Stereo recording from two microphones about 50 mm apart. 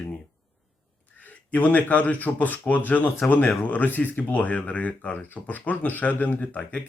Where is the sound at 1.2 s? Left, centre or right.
Left.